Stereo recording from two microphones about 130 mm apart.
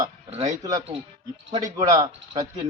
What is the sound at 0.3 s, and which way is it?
Speech, 55° right (ahead or behind).